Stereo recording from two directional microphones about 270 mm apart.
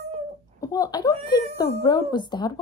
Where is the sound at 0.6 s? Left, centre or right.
Centre.